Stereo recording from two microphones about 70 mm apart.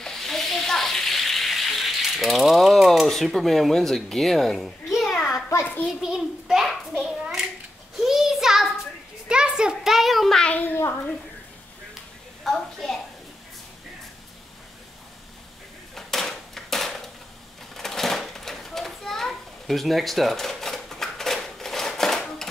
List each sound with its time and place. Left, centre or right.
0.0 s frying: centre
3.3 s a child's voice: centre
8.0 s a sound: centre
9.3 s a child's voice: centre
10.4 s a child's voice: left
12.4 s a child's voice: centre
15.9 s a sound: centre